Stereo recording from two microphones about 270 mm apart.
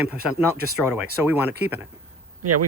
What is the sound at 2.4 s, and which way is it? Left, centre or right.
Speech, right.